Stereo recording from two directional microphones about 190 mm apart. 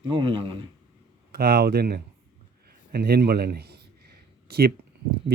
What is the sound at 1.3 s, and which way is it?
A man's voice, 50° right (ahead or behind).